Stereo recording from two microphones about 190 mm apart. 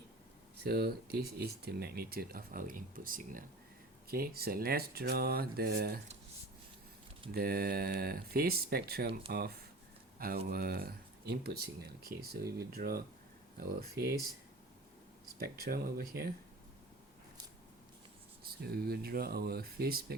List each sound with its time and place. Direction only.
0.6 s speech: 55° right (ahead or behind)
7.3 s speech: 55° right (ahead or behind)
15.4 s speech: 55° right (ahead or behind)
18.6 s speech: 55° right (ahead or behind)